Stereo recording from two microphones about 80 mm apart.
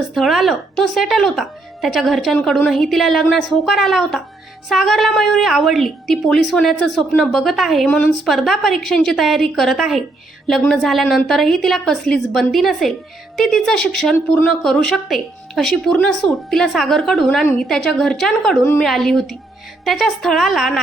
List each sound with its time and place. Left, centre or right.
0.1 s a woman's voice: centre
7.9 s a woman's voice: centre
8.2 s a woman's voice: centre